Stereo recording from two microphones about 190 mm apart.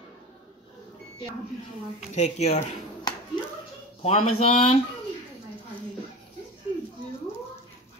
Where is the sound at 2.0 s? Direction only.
35° left (ahead or behind).